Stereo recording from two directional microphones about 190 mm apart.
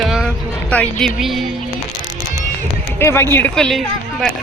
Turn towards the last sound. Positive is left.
turn(degrees=5)  # may be behind; listen again after turning